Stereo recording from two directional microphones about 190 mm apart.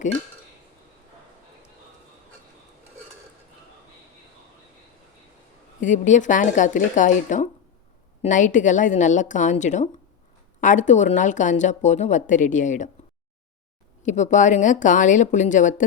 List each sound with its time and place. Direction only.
5.8 s speech: 40° left (ahead or behind)
14.0 s speech: 40° left (ahead or behind)